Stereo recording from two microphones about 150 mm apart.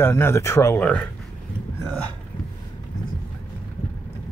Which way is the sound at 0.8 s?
5° left (ahead or behind).